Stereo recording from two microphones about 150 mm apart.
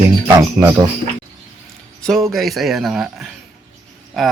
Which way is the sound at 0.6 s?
10° right (ahead or behind).